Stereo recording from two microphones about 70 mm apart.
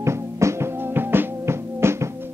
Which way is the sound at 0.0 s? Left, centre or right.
Right.